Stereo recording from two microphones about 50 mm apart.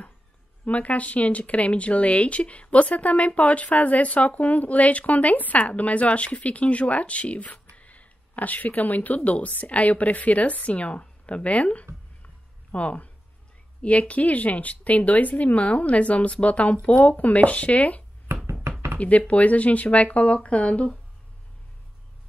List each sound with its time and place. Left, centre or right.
0.7 s speech: left